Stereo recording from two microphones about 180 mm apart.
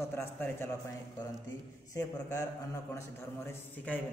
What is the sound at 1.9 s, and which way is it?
Speech, 20° left (ahead or behind).